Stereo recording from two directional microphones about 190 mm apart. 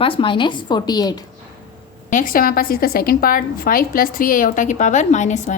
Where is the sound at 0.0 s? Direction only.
25° left (ahead or behind).